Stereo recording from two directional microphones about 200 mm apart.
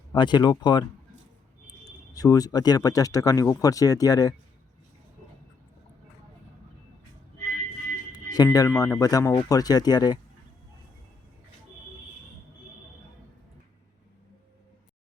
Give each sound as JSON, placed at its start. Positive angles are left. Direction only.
{"t": 0.1, "sound": "speech", "side_deg": 20}
{"t": 2.1, "sound": "speech", "side_deg": 20}
{"t": 8.1, "sound": "music", "side_deg": 20}
{"t": 8.4, "sound": "speech", "side_deg": 15}